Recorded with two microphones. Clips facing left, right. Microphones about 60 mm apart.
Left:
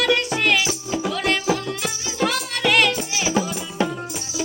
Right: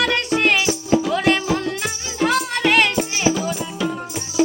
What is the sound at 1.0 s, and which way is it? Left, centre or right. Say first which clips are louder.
Music: right 3 dB; right.